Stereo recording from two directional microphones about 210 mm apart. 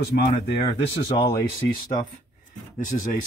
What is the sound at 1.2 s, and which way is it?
Speech, 20° left (ahead or behind).